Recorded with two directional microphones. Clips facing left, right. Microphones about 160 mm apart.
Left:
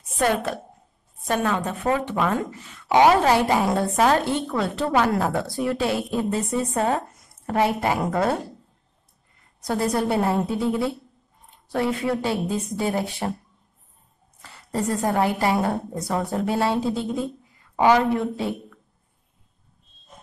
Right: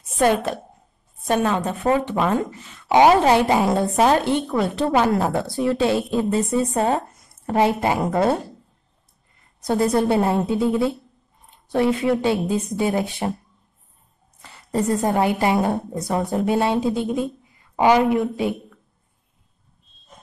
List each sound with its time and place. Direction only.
0.2 s speech: 20° right (ahead or behind)
9.7 s speech: 25° right (ahead or behind)
14.7 s a woman's voice: 20° right (ahead or behind)